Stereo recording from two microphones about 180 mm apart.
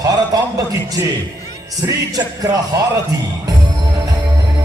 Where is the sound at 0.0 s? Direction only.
20° right (ahead or behind).